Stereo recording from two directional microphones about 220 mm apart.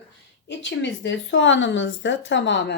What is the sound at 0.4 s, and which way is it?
A woman's voice, 55° left (ahead or behind).